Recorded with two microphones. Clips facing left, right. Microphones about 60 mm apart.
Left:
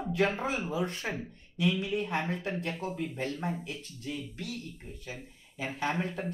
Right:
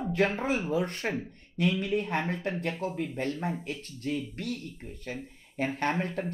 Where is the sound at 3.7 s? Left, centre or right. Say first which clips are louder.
Right 5 dB; right.